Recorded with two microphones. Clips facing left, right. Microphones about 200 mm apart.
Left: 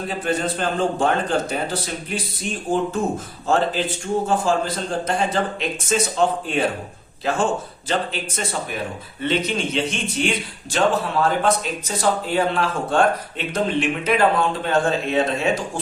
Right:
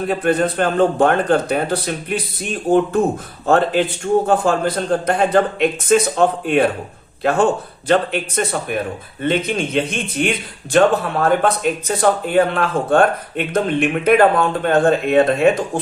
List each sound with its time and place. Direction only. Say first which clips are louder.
0.1 s a man's voice: right 6 dB; 60° right (ahead or behind)